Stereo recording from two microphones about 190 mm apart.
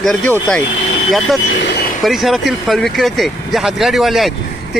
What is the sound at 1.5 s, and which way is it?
Speech, 65° left (ahead or behind).